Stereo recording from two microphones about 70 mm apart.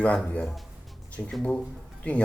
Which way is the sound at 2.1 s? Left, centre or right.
Centre.